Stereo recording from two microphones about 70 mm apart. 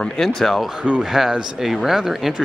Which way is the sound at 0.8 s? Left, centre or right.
Centre.